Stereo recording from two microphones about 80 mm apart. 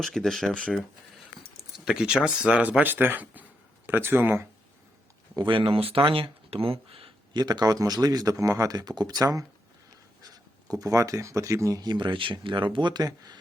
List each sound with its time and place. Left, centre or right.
0.0 s speech: centre
1.8 s speech: centre; by 4.4 s right
5.4 s speech: right
7.3 s speech: right
11.8 s speech: right